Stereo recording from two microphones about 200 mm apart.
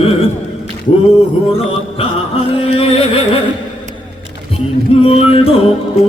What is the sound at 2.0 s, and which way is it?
Music, 30° left (ahead or behind).